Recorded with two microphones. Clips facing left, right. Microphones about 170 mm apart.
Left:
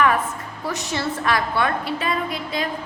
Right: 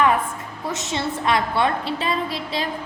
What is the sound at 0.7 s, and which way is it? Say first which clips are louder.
A woman's voice: even; 20° right (ahead or behind).